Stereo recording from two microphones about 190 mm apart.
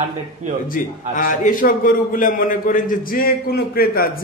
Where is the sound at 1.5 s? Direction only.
45° left (ahead or behind).